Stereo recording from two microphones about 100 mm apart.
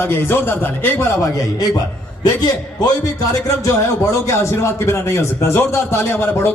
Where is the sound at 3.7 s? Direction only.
30° left (ahead or behind).